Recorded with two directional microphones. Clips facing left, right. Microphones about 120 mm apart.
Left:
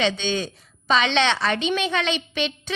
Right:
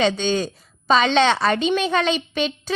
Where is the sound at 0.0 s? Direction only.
40° right (ahead or behind).